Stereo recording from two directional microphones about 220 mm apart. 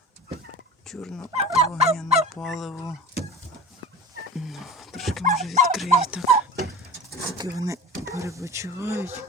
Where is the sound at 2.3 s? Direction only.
Centre (ahead or behind).